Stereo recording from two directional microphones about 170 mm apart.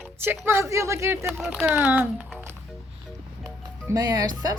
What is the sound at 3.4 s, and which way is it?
Music, 20° right (ahead or behind).